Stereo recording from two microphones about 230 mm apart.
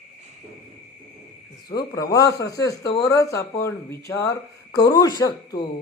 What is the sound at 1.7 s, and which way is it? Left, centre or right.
Speech, centre.